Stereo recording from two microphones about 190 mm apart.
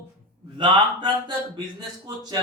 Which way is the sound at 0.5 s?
25° right (ahead or behind).